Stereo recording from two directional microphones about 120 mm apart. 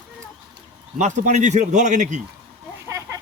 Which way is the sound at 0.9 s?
90° right.